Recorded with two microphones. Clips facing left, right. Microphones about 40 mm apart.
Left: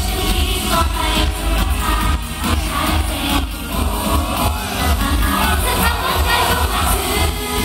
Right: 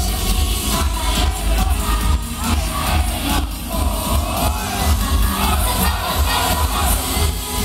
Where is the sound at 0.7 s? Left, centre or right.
Centre.